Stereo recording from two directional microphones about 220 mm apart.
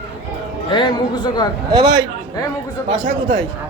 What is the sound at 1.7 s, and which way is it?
Speech, 15° right (ahead or behind).